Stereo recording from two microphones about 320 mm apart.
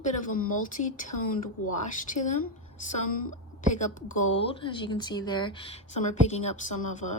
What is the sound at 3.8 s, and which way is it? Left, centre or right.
A woman's voice, left.